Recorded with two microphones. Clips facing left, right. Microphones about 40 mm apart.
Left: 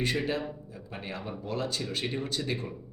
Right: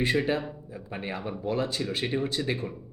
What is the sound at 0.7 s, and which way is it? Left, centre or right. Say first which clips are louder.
Speech: right 4 dB; right.